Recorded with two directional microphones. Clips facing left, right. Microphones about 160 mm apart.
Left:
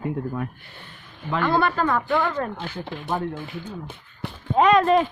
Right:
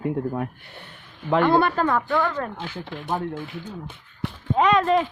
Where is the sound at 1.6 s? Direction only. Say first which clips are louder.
Right 1 dB; 50° right (ahead or behind).